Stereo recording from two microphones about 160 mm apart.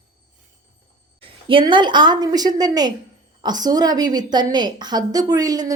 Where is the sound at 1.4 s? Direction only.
30° right (ahead or behind).